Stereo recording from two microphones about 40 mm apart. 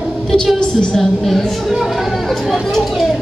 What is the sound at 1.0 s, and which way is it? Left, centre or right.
Speech, centre.